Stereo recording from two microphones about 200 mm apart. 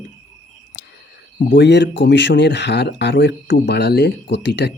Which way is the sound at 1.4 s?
60° left (ahead or behind).